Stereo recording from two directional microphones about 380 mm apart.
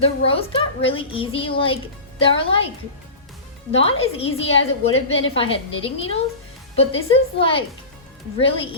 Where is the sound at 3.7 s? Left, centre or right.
Centre.